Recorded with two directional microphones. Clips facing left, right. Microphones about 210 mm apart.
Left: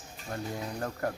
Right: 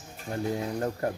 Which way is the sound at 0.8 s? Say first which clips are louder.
Right 1 dB; 25° right (ahead or behind).